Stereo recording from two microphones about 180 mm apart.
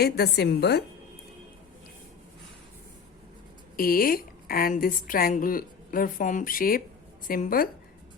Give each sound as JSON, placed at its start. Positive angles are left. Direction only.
{"t": 0.0, "sound": "a woman's voice", "side_deg": 65}
{"t": 3.8, "sound": "a woman's voice", "side_deg": 55}